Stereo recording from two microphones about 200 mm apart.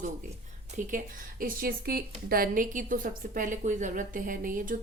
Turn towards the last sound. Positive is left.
turn(degrees=-45)  # may be behind; listen again after turning